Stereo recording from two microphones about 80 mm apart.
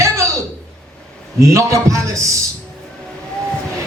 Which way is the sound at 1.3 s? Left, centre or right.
Right.